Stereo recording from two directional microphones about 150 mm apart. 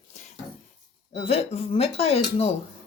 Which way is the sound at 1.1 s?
45° left (ahead or behind).